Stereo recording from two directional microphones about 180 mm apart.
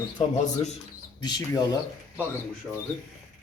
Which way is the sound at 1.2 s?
20° left (ahead or behind).